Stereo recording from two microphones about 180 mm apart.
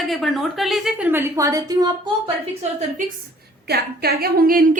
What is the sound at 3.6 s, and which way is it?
A woman's voice, 60° right (ahead or behind).